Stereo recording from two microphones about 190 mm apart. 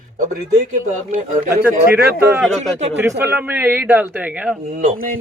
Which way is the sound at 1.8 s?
10° right (ahead or behind).